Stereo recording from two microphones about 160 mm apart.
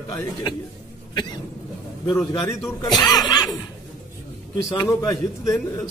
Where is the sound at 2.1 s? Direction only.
15° left (ahead or behind).